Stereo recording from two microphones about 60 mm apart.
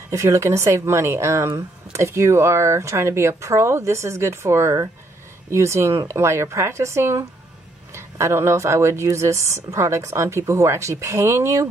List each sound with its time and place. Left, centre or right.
0.1 s speech: right